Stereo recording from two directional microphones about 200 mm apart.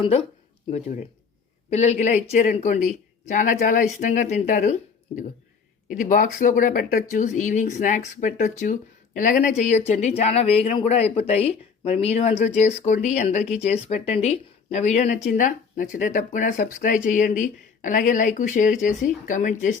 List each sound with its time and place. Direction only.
0.0 s speech: 30° left (ahead or behind)